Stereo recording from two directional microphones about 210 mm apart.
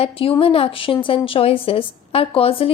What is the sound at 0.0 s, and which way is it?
A woman's voice, 25° left (ahead or behind).